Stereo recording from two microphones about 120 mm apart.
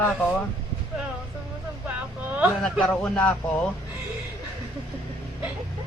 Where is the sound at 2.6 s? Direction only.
5° left (ahead or behind).